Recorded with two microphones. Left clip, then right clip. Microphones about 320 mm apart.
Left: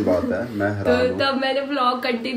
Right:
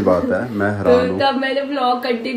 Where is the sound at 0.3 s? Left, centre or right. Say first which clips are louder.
Right 4 dB; right.